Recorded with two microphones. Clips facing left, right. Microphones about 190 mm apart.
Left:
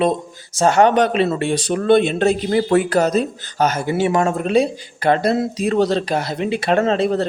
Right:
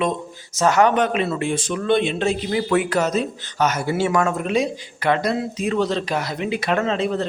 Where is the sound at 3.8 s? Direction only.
20° left (ahead or behind).